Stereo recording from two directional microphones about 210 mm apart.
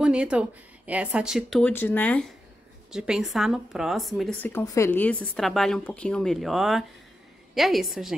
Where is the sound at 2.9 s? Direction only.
5° right (ahead or behind).